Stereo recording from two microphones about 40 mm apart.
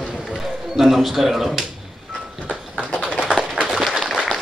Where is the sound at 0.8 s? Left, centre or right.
Centre.